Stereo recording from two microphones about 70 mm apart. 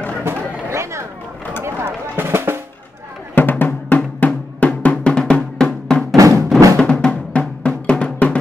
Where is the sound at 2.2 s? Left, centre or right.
Right.